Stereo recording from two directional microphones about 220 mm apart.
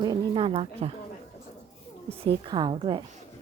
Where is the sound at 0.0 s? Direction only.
20° right (ahead or behind).